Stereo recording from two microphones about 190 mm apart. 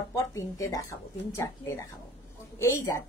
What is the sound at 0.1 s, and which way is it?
A woman's voice, 15° left (ahead or behind).